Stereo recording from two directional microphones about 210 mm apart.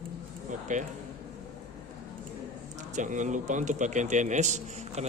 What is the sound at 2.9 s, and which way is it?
A man's voice, 35° right (ahead or behind).